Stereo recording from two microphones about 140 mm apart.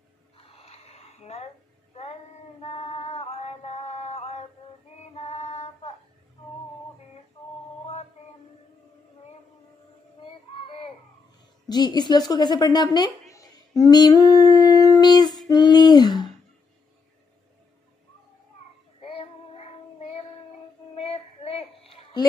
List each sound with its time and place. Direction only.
0.4 s a sound: 45° left (ahead or behind)
2.6 s music: 50° left (ahead or behind)
5.1 s female singing: 50° left (ahead or behind)
10.5 s a sound: 40° left (ahead or behind)
11.7 s a woman's voice: 30° left (ahead or behind)
13.3 s singing: 25° left (ahead or behind)
19.1 s child singing: 45° left (ahead or behind)